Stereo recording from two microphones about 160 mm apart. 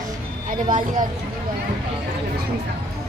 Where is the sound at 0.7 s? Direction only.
55° right (ahead or behind).